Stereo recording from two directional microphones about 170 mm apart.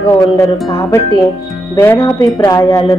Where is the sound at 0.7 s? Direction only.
20° left (ahead or behind).